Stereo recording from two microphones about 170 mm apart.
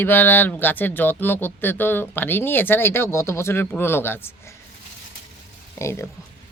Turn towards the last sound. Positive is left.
turn(degrees=15)  # may be behind; listen again after turning